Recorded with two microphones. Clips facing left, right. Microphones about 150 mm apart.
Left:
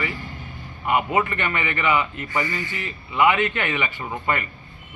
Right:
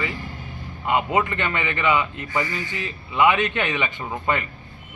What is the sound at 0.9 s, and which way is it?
A man's voice, 20° right (ahead or behind).